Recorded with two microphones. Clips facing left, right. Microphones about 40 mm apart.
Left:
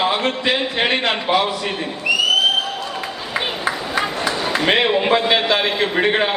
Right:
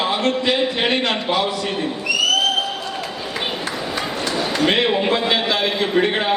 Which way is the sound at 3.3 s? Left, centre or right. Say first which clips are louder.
Left 4 dB; centre.